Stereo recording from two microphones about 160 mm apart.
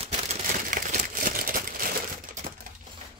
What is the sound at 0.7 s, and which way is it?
Crumpling, 55° right (ahead or behind).